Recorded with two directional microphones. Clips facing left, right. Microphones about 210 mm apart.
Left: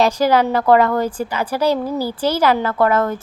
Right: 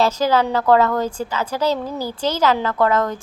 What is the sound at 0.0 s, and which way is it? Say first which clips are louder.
A woman's voice: left 2 dB; 15° left (ahead or behind).